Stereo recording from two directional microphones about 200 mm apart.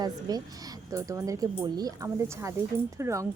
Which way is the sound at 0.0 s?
20° right (ahead or behind).